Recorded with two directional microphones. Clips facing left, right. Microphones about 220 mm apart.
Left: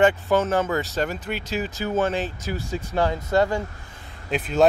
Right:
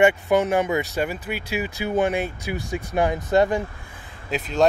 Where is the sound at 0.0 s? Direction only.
15° right (ahead or behind).